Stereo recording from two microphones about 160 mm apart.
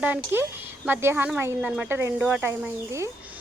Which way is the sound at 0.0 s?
10° right (ahead or behind).